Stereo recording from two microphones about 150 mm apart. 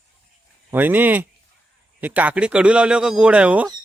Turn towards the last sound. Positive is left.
turn(degrees=-10)  # may be behind; listen again after turning